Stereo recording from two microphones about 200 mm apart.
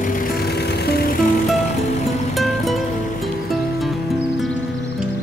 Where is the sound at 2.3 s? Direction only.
Centre (ahead or behind).